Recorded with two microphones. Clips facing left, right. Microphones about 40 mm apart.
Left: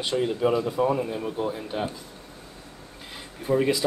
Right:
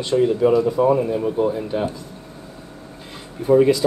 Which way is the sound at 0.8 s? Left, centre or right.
Centre.